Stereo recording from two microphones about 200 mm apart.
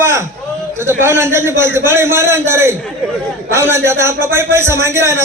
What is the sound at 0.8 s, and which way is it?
A man's voice, 10° right (ahead or behind).